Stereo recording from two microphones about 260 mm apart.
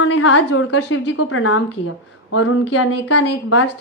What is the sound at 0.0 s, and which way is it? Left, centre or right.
A woman's voice, left.